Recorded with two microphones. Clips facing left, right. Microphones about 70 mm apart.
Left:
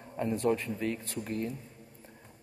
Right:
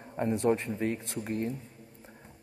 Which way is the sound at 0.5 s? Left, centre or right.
Right.